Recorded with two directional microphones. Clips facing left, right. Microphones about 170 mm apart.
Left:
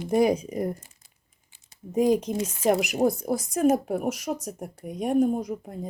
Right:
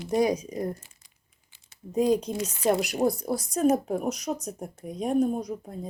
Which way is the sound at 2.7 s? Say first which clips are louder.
Left 2 dB; 20° left (ahead or behind).